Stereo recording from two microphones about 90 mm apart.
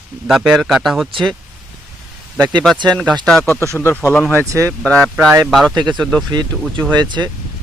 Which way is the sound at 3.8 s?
30° left (ahead or behind).